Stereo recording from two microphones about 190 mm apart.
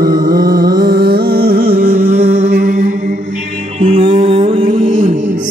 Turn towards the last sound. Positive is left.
turn(degrees=-30)  # may be behind; listen again after turning